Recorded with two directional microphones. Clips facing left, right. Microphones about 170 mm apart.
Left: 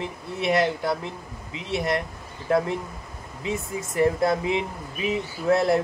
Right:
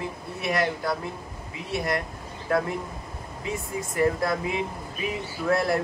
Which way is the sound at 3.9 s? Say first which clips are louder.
Left 3 dB; 25° left (ahead or behind).